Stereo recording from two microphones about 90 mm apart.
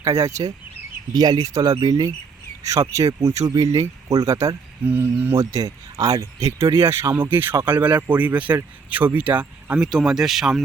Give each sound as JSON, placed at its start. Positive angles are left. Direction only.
{"t": 0.0, "sound": "speech", "side_deg": -35}
{"t": 1.1, "sound": "speech", "side_deg": -45}
{"t": 4.9, "sound": "speech", "side_deg": -25}
{"t": 5.4, "sound": "speech", "side_deg": -40}
{"t": 6.7, "sound": "speech", "side_deg": -30}
{"t": 9.9, "sound": "speech", "side_deg": -5}